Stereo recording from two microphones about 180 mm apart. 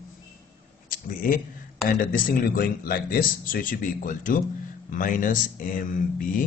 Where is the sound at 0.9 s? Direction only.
50° left (ahead or behind).